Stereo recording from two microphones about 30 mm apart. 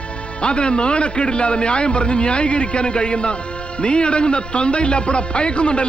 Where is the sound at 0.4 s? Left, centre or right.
Left.